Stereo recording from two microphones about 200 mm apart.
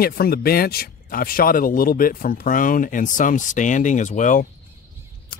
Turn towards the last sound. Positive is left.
turn(degrees=40)  # may be behind; listen again after turning